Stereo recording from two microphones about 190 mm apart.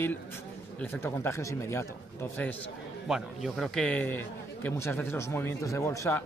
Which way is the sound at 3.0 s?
Centre (ahead or behind).